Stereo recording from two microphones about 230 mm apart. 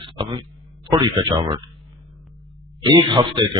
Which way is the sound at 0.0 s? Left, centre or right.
Right.